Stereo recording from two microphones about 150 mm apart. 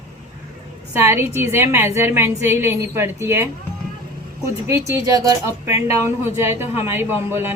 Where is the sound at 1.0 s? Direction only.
15° right (ahead or behind).